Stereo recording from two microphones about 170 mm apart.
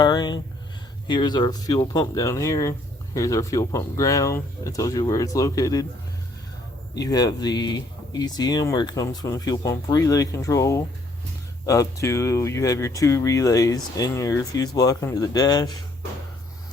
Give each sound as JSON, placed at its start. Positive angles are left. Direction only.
{"t": 0.0, "sound": "speech", "side_deg": 25}
{"t": 6.9, "sound": "speech", "side_deg": 20}